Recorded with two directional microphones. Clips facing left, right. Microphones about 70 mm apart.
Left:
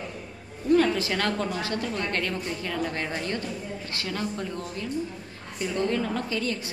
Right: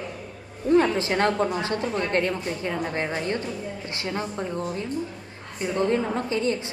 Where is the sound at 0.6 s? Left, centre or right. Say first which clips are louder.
Right 2 dB; right.